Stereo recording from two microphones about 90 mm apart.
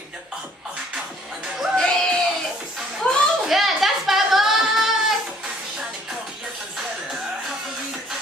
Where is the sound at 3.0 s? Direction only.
15° left (ahead or behind).